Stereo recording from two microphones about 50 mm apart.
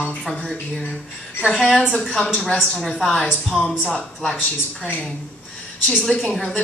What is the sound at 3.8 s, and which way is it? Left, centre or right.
Speech, centre.